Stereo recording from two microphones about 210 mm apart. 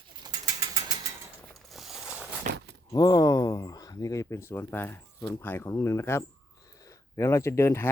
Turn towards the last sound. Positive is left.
turn(degrees=10)  # may be behind; listen again after turning